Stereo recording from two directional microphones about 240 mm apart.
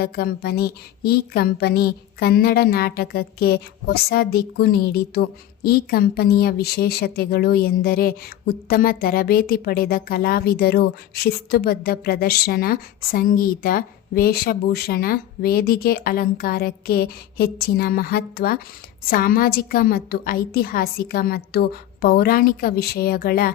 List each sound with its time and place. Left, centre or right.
0.0 s a woman's voice: left